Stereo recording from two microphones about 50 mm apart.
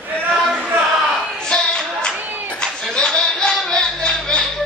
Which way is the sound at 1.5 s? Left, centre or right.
Centre.